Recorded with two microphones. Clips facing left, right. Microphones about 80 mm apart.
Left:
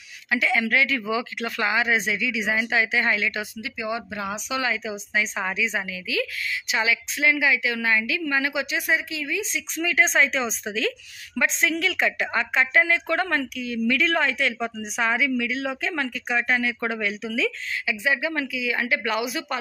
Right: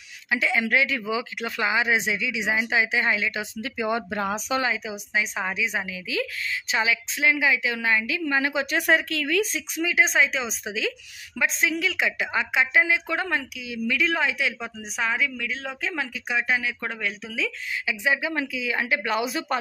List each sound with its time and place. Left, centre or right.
0.3 s speech: centre
3.6 s speech: right
4.6 s a woman's voice: centre
8.6 s a woman's voice: right
9.8 s speech: centre
17.8 s speech: right